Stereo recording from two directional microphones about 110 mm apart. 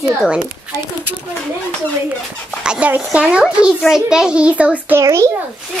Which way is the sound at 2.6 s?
10° right (ahead or behind).